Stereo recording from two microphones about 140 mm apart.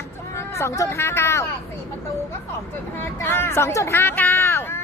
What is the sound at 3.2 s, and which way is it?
Speech, 15° left (ahead or behind).